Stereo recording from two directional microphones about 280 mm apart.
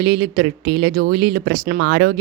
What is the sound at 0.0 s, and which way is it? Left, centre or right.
Speech, right.